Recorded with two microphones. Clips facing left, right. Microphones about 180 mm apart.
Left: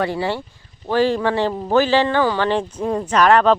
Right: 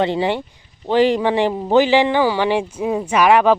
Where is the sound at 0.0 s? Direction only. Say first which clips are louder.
Right 3 dB; 20° right (ahead or behind).